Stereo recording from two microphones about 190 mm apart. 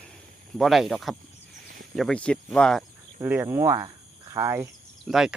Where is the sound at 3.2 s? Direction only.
10° right (ahead or behind).